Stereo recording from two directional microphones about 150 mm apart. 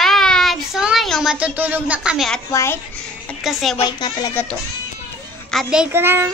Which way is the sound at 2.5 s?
20° left (ahead or behind).